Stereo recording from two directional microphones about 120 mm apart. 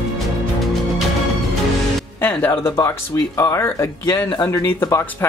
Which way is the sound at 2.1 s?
15° left (ahead or behind).